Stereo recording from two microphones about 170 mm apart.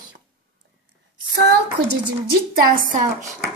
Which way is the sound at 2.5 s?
55° right (ahead or behind).